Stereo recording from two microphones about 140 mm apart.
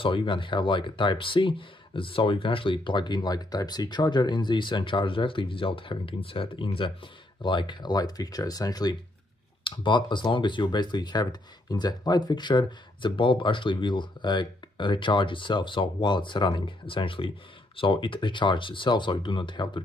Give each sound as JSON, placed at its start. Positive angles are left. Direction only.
{"t": 0.0, "sound": "speech", "side_deg": 35}